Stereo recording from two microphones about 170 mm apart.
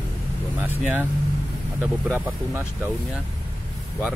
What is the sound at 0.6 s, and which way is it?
Speech, 10° right (ahead or behind).